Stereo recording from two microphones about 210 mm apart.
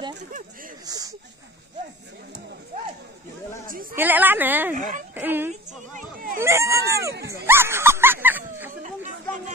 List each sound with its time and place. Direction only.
0.2 s speech: 40° right (ahead or behind)
0.8 s a woman's voice: 20° right (ahead or behind)
3.9 s a woman's voice: 10° right (ahead or behind)
4.7 s speech: 35° right (ahead or behind)
5.1 s a woman's voice: 10° right (ahead or behind)
5.9 s a sound: 40° right (ahead or behind)
6.4 s a woman's voice: 15° right (ahead or behind)
7.4 s dog: 10° right (ahead or behind)